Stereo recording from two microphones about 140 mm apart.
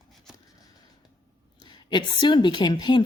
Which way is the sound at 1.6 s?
35° left (ahead or behind).